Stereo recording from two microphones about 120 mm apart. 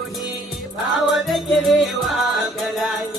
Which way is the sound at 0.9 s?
Centre (ahead or behind).